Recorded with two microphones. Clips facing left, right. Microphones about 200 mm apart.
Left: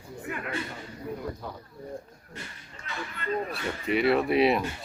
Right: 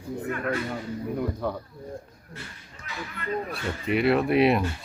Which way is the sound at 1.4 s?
60° right (ahead or behind).